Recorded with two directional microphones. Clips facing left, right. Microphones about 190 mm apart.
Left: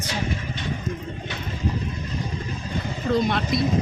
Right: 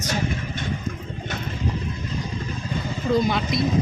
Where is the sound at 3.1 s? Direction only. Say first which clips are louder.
Right 1 dB; centre (ahead or behind).